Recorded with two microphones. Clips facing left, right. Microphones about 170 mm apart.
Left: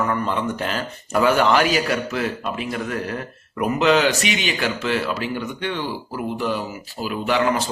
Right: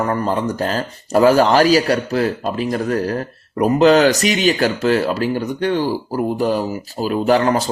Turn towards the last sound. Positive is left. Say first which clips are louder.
# right 5 dB
turn(degrees=-40)  # may be behind; listen again after turning